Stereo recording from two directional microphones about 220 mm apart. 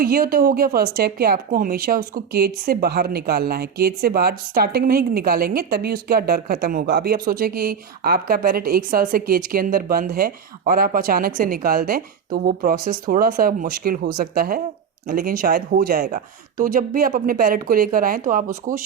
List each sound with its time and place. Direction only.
0.0 s speech: 40° right (ahead or behind)